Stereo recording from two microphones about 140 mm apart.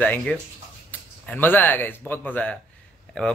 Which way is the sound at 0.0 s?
10° left (ahead or behind).